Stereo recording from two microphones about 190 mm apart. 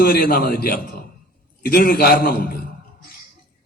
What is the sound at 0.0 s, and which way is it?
A man's voice, 50° left (ahead or behind).